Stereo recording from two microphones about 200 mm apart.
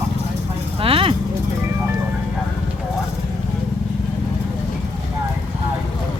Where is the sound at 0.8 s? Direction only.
30° right (ahead or behind).